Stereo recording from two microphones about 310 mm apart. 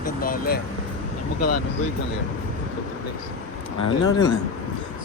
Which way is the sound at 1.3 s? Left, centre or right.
Left.